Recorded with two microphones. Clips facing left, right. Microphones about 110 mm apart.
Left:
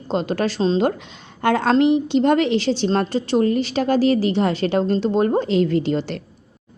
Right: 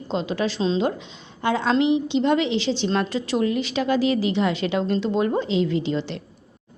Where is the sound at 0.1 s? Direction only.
50° left (ahead or behind).